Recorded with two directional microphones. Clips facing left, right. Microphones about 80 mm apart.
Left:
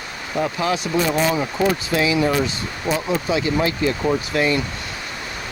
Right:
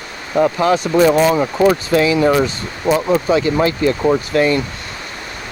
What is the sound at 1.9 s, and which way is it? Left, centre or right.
Speech, right.